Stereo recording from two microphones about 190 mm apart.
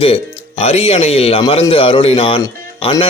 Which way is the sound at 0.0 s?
30° left (ahead or behind).